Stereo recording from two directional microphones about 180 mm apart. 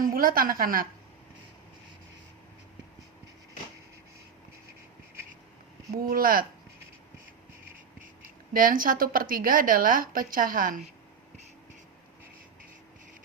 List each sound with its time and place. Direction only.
0.0 s a woman's voice: 55° right (ahead or behind)
6.0 s speech: 55° right (ahead or behind)
7.9 s a woman's voice: 50° right (ahead or behind)